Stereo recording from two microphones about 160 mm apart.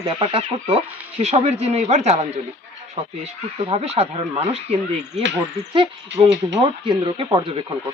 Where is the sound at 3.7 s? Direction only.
40° right (ahead or behind).